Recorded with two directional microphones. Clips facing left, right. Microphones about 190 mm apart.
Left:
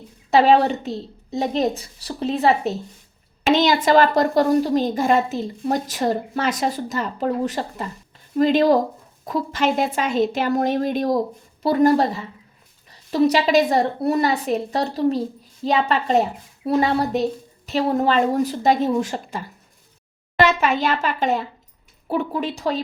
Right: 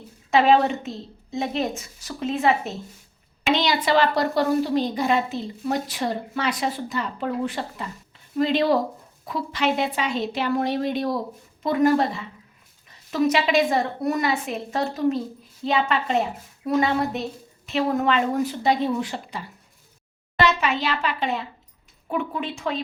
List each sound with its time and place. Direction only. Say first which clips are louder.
0.3 s a woman's voice: left 3 dB; 35° left (ahead or behind)
3.5 s a woman's voice: left 5 dB; 45° left (ahead or behind)
22.0 s a woman's voice: left 4 dB; 35° left (ahead or behind)